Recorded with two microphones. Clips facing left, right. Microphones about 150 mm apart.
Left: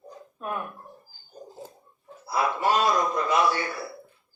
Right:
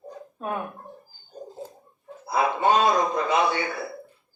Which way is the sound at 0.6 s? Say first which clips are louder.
Right 3 dB; 20° right (ahead or behind).